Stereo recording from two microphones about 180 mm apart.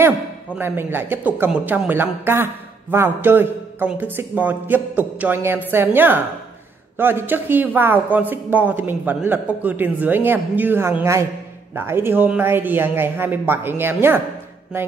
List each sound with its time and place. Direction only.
0.6 s speech: 10° right (ahead or behind)